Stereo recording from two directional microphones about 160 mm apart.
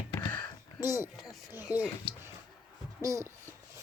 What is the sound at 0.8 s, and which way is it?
Speech, 15° right (ahead or behind).